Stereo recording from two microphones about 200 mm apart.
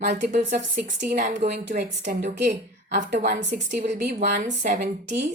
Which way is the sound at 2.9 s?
40° right (ahead or behind).